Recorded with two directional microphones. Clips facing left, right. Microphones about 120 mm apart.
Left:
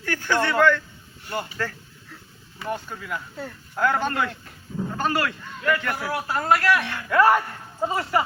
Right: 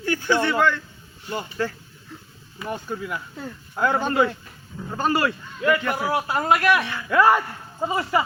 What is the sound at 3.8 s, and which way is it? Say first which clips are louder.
A man's voice: right 2 dB; 15° right (ahead or behind).